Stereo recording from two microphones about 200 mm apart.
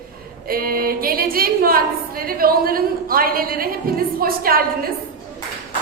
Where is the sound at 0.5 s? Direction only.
45° right (ahead or behind).